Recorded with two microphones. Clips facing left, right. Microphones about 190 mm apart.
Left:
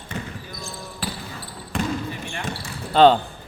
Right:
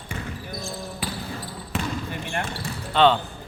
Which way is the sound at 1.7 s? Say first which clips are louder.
Left 3 dB; 5° right (ahead or behind).